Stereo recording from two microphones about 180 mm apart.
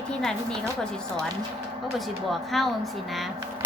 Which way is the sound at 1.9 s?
Centre (ahead or behind).